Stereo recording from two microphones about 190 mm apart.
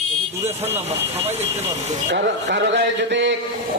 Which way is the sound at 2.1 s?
65° right (ahead or behind).